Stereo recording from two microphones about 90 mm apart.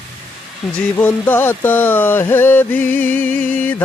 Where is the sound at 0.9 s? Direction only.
20° left (ahead or behind).